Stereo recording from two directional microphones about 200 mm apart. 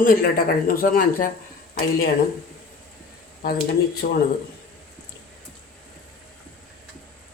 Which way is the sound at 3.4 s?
50° left (ahead or behind).